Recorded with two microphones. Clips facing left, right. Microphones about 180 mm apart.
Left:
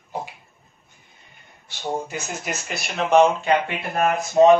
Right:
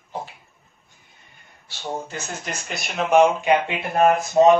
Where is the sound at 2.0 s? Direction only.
10° left (ahead or behind).